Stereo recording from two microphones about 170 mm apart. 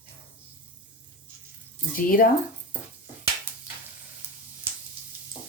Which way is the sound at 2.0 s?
55° left (ahead or behind).